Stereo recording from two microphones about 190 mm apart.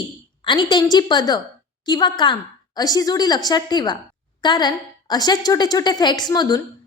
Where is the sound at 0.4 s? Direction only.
25° left (ahead or behind).